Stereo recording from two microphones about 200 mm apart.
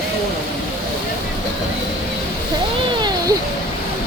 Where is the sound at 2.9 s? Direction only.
20° right (ahead or behind).